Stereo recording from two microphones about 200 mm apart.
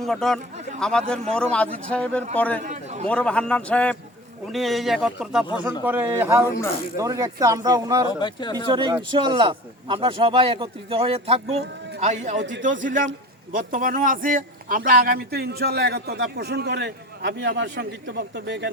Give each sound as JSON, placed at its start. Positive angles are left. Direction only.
{"t": 0.0, "sound": "a man's voice", "side_deg": 0}
{"t": 2.6, "sound": "a sound", "side_deg": -35}
{"t": 3.1, "sound": "a man's voice", "side_deg": 5}
{"t": 8.2, "sound": "speech", "side_deg": 20}
{"t": 8.7, "sound": "a man's voice", "side_deg": -25}
{"t": 12.4, "sound": "a man's voice", "side_deg": -65}
{"t": 12.8, "sound": "a man's voice", "side_deg": -40}